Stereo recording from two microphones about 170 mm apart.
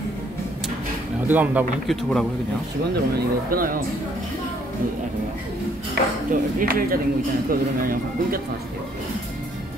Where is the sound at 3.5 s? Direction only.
55° right (ahead or behind).